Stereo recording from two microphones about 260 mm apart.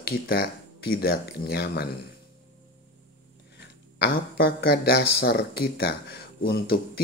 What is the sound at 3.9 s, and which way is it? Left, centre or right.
Speech, left.